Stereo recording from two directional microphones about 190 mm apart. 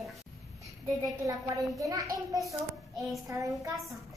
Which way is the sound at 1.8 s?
20° right (ahead or behind).